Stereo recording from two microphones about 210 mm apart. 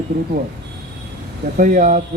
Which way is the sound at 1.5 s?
40° right (ahead or behind).